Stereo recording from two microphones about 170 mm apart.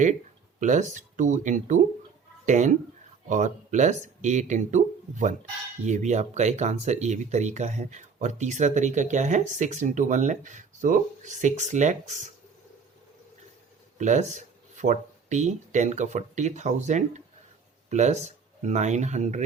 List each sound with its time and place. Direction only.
0.6 s speech: 45° right (ahead or behind)
14.0 s speech: 45° right (ahead or behind)